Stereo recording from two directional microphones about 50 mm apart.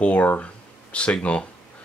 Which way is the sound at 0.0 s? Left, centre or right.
Left.